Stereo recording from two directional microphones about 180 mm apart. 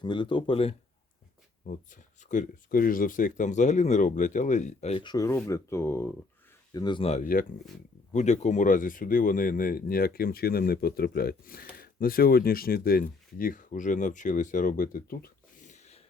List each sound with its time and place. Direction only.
0.0 s speech: 25° left (ahead or behind)
1.6 s speech: 45° left (ahead or behind)
5.0 s speech: 20° left (ahead or behind)
6.7 s speech: 25° left (ahead or behind); by 16.0 s 40° left (ahead or behind)